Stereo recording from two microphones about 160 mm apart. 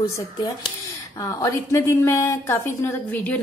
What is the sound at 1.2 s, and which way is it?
Speech, 20° left (ahead or behind).